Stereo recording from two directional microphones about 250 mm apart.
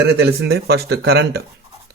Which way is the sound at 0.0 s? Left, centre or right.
Right.